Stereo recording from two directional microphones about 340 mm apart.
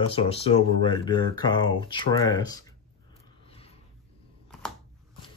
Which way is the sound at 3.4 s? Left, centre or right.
Centre.